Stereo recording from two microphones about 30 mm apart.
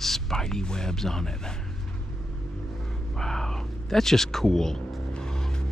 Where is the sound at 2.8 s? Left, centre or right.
Centre.